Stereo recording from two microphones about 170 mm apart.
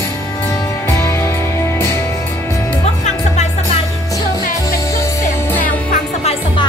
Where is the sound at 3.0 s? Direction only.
40° left (ahead or behind).